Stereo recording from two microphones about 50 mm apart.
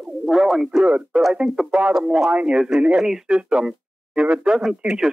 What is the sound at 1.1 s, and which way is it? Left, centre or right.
A man's voice, centre.